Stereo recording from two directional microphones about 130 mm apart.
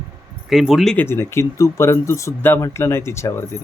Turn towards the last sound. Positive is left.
turn(degrees=20)  # may be behind; listen again after turning